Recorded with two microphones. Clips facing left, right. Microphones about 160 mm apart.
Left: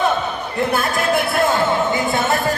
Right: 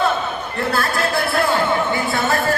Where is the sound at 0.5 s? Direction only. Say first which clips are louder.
Left 2 dB; 20° left (ahead or behind).